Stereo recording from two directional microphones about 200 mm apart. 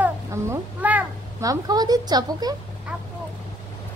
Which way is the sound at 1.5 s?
20° right (ahead or behind).